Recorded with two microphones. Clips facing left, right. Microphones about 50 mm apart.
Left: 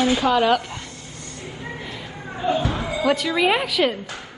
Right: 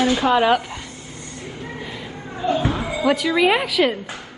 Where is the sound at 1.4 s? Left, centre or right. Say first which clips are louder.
Right 1 dB; centre.